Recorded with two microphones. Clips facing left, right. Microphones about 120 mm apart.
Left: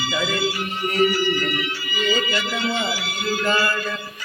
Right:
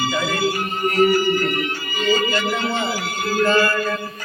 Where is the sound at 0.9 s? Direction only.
45° right (ahead or behind).